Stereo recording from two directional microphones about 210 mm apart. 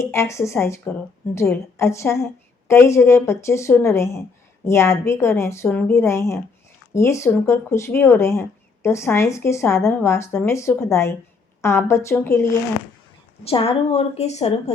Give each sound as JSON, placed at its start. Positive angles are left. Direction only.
{"t": 0.0, "sound": "speech", "side_deg": 15}
{"t": 13.4, "sound": "a woman's voice", "side_deg": 25}